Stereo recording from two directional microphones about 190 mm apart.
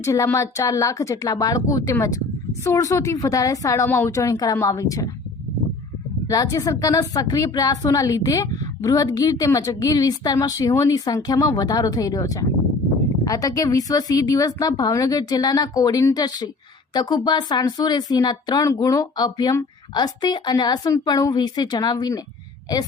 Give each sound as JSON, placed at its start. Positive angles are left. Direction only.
{"t": 0.0, "sound": "a woman's voice", "side_deg": 15}
{"t": 6.2, "sound": "a woman's voice", "side_deg": 20}